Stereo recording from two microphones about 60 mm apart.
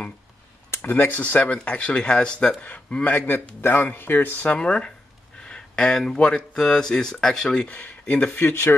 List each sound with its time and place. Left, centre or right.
0.8 s speech: left; by 2.5 s centre
3.0 s a man's voice: left; by 4.9 s centre
5.4 s a sound: centre
6.1 s speech: centre
7.6 s speech: left
8.4 s a man's voice: left